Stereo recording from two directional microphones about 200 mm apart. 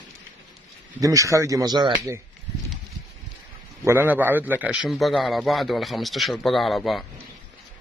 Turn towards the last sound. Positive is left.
turn(degrees=0)  # may be behind; listen again after turning